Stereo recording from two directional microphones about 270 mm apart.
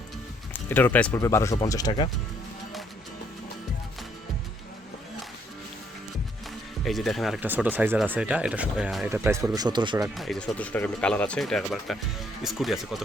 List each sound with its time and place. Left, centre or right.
0.5 s speech: centre
6.8 s speech: centre
10.2 s speech: centre